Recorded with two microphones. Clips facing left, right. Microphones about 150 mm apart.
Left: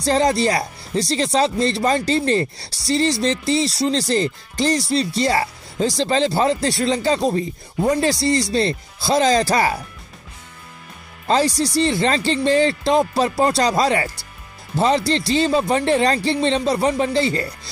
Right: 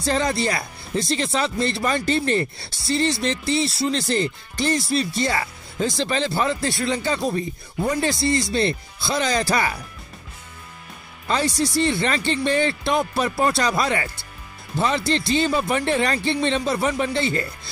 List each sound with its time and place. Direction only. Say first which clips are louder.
0.0 s speech: left 5 dB; 40° left (ahead or behind)
3.5 s speech: left 3 dB; 90° left
3.8 s speech: left 3 dB; 30° left (ahead or behind)
7.9 s speech: left 3 dB; 40° left (ahead or behind)
11.2 s speech: left 4 dB; 35° left (ahead or behind)
13.7 s speech: left 4 dB; 35° left (ahead or behind)